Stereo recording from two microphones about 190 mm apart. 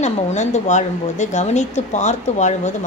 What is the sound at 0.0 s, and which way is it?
Speech, 40° left (ahead or behind).